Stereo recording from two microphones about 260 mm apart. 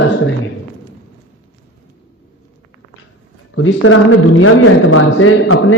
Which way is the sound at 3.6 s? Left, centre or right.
Left.